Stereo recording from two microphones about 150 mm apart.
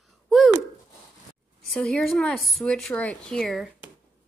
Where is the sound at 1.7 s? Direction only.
5° left (ahead or behind).